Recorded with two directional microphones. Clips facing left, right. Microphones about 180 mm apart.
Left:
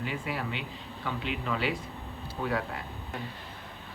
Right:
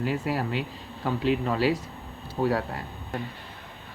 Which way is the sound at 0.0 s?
40° right (ahead or behind).